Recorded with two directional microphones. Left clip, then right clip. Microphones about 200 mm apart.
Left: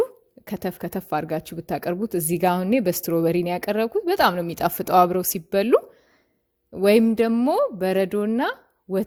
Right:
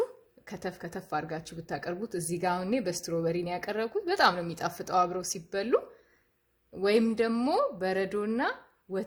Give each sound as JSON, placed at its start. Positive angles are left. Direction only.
{"t": 0.4, "sound": "speech", "side_deg": 35}